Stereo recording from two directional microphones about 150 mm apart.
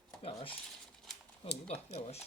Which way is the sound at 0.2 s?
40° left (ahead or behind).